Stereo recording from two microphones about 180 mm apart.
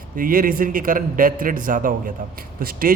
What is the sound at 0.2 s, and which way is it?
A man's voice, 50° right (ahead or behind).